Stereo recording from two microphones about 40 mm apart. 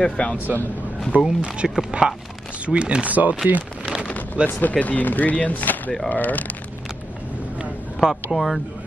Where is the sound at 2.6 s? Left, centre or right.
Right.